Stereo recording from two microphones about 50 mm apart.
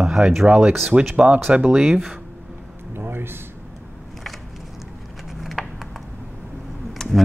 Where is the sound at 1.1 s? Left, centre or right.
Right.